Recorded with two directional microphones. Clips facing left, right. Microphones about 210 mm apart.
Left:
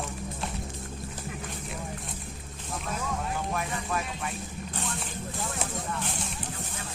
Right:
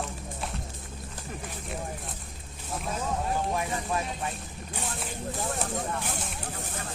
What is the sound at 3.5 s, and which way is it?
Music, 25° right (ahead or behind).